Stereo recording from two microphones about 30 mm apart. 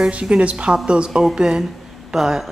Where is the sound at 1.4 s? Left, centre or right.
Right.